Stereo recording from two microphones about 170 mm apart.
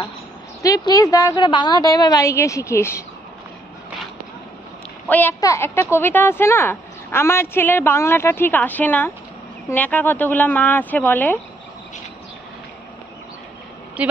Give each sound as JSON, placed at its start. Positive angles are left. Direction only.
{"t": 0.6, "sound": "a woman's voice", "side_deg": 20}
{"t": 5.0, "sound": "a child's voice", "side_deg": 10}
{"t": 14.0, "sound": "speech", "side_deg": -10}